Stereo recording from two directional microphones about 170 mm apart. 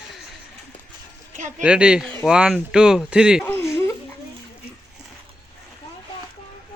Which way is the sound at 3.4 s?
15° left (ahead or behind).